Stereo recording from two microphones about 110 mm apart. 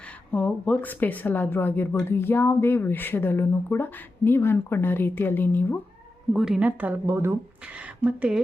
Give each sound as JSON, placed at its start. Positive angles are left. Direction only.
{"t": 0.3, "sound": "a woman's voice", "side_deg": 15}
{"t": 6.3, "sound": "a woman's voice", "side_deg": -5}
{"t": 8.0, "sound": "a woman's voice", "side_deg": -10}